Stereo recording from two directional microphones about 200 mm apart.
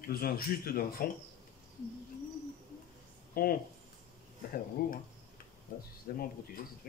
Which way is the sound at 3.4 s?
50° left (ahead or behind).